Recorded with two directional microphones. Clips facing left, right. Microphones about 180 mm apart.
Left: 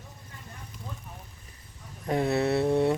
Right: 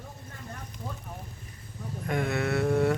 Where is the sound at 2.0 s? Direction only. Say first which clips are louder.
Left 4 dB; 35° left (ahead or behind).